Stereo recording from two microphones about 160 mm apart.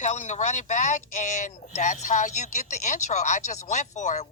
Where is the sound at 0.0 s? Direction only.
50° left (ahead or behind).